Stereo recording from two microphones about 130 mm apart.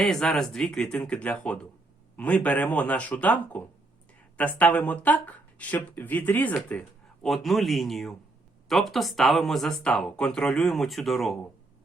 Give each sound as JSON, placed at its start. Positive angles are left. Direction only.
{"t": 0.0, "sound": "speech", "side_deg": 5}